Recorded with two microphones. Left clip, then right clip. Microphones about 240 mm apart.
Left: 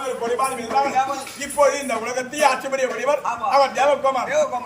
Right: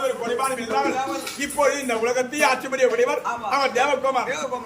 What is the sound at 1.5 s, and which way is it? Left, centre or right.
A man's voice, centre.